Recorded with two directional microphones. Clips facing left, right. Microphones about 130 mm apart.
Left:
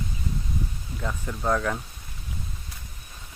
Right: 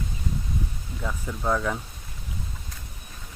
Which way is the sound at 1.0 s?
Centre (ahead or behind).